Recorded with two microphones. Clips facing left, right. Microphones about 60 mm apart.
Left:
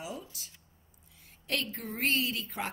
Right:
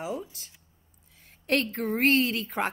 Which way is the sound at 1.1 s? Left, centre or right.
Right.